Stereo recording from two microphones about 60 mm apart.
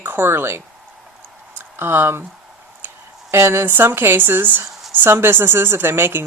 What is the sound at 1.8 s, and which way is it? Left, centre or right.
Speech, right.